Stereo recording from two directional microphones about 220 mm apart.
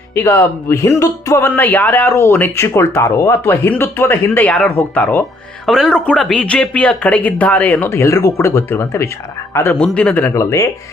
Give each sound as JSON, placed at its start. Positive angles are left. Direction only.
{"t": 0.1, "sound": "speech", "side_deg": 10}